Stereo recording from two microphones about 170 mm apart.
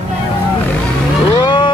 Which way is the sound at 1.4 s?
25° left (ahead or behind).